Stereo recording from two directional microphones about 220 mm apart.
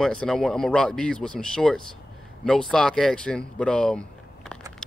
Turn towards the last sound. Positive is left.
turn(degrees=5)  # may be behind; listen again after turning